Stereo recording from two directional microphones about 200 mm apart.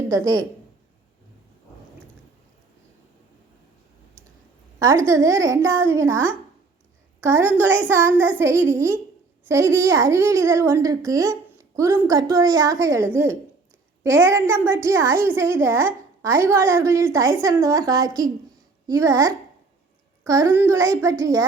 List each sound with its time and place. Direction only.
4.8 s a child's voice: 15° right (ahead or behind)